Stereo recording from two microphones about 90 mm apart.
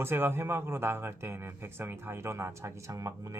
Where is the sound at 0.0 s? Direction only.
25° right (ahead or behind).